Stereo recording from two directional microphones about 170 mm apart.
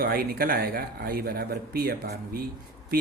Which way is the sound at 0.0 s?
60° right (ahead or behind).